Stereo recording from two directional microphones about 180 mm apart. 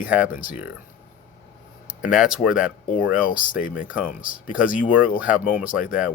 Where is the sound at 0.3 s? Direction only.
50° left (ahead or behind).